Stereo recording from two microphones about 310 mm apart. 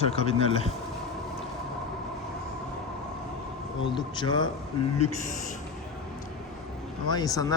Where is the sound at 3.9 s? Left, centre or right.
Centre.